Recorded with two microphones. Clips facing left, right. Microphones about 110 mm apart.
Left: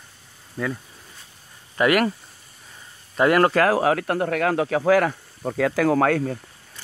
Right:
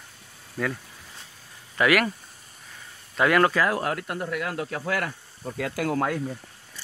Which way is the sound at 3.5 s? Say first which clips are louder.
Left 6 dB; 80° left.